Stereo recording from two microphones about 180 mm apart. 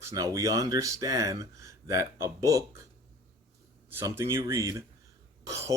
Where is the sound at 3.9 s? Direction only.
15° right (ahead or behind).